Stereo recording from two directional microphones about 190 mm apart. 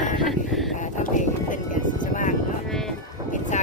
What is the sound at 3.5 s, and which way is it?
Vehicle, 40° left (ahead or behind).